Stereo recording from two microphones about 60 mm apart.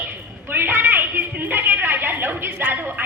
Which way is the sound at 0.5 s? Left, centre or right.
Right.